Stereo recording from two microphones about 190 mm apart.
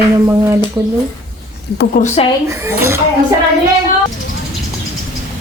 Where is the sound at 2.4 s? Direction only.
15° right (ahead or behind).